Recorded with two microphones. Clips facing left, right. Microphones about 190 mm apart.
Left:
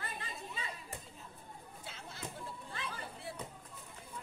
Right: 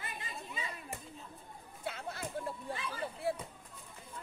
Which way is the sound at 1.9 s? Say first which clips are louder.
Right 11 dB; 60° right (ahead or behind).